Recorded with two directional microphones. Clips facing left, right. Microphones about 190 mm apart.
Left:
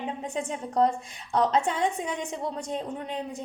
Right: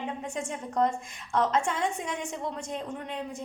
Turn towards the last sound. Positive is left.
turn(degrees=35)  # may be behind; listen again after turning